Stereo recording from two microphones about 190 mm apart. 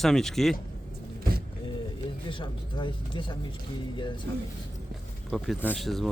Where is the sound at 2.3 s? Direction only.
25° left (ahead or behind).